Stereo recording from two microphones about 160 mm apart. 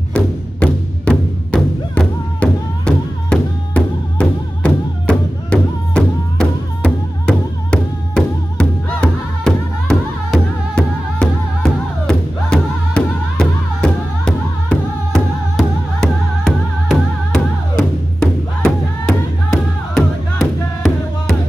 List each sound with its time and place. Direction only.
0.1 s music: 5° left (ahead or behind)